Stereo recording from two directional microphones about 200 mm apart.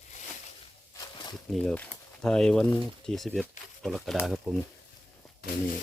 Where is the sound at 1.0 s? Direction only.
20° left (ahead or behind).